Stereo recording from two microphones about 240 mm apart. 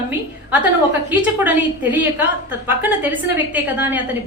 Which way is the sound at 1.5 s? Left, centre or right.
Centre.